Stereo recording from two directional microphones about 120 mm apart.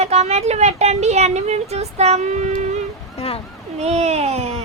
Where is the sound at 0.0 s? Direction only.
65° right (ahead or behind).